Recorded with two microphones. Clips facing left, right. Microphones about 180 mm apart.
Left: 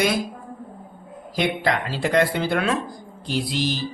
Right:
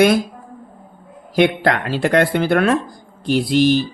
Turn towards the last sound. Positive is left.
turn(degrees=-60)  # may be behind; listen again after turning